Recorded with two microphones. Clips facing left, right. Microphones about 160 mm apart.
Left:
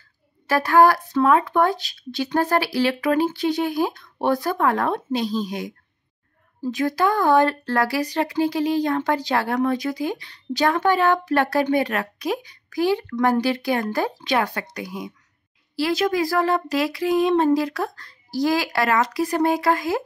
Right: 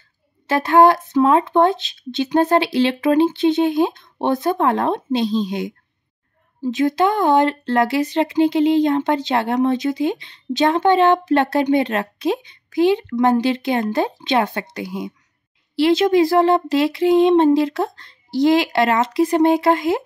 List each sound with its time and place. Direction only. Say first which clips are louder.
0.5 s speech: right 3 dB; 25° right (ahead or behind)